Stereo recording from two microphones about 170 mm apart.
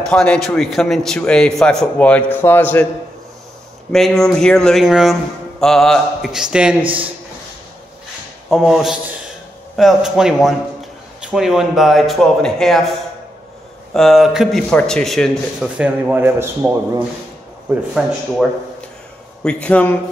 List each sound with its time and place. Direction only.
0.0 s a man's voice: 5° left (ahead or behind)
3.9 s a man's voice: centre (ahead or behind)
6.8 s speech: 30° right (ahead or behind)
8.5 s a man's voice: centre (ahead or behind)
13.9 s a man's voice: centre (ahead or behind)
15.8 s speech: 10° right (ahead or behind)
18.0 s a man's voice: centre (ahead or behind)
19.4 s a man's voice: 5° left (ahead or behind)